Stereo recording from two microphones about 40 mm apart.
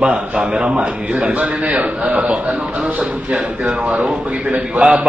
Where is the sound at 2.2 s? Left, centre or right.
Right.